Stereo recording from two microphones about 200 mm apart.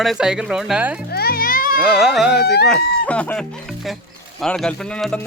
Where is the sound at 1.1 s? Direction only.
50° left (ahead or behind).